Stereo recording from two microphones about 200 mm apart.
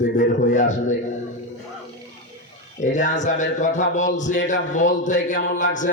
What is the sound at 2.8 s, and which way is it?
A man's voice, 40° left (ahead or behind).